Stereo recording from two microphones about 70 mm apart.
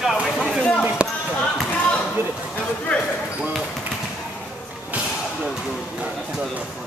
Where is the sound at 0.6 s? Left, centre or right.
Centre.